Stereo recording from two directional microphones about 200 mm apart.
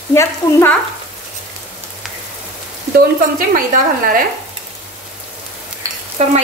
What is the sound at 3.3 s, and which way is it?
Speech, 45° right (ahead or behind).